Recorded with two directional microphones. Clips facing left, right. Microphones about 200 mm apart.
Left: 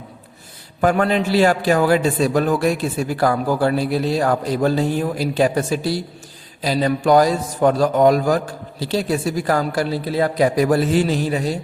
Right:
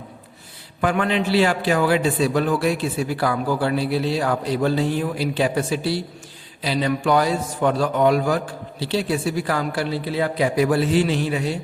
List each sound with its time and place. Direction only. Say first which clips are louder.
0.8 s a man's voice: left 4 dB; 40° left (ahead or behind)